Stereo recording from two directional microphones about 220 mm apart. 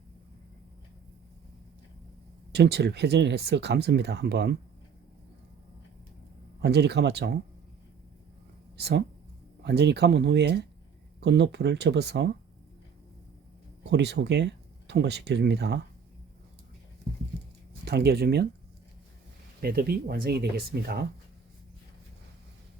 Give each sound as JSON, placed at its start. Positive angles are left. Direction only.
{"t": 2.5, "sound": "speech", "side_deg": -50}
{"t": 6.6, "sound": "speech", "side_deg": -50}
{"t": 8.8, "sound": "speech", "side_deg": -50}
{"t": 13.9, "sound": "speech", "side_deg": -50}
{"t": 17.8, "sound": "speech", "side_deg": -45}
{"t": 19.6, "sound": "speech", "side_deg": -45}